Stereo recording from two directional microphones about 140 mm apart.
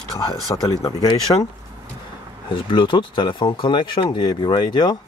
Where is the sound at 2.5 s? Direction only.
35° left (ahead or behind).